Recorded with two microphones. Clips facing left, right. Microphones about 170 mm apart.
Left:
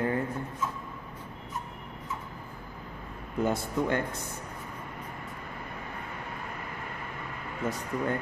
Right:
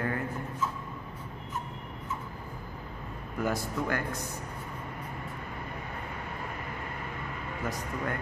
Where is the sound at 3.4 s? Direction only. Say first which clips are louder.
Left 3 dB; 25° left (ahead or behind).